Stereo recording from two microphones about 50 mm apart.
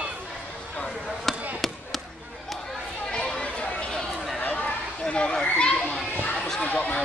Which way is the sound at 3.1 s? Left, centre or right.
Centre.